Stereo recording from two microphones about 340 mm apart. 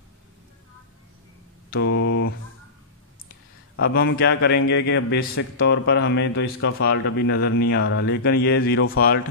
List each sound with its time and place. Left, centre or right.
1.7 s a man's voice: left
3.7 s a man's voice: left